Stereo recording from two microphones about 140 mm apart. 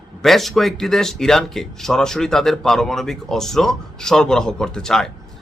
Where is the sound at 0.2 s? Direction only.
Centre (ahead or behind).